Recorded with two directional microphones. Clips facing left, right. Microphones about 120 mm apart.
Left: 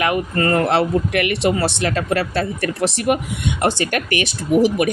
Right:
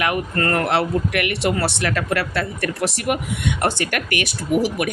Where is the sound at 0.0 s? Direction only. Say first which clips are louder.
Left 3 dB; 20° left (ahead or behind).